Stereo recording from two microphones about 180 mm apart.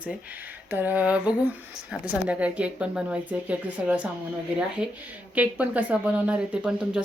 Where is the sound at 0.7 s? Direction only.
10° right (ahead or behind).